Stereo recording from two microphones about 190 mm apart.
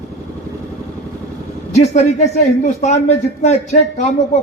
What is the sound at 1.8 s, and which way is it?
Speech, 40° left (ahead or behind).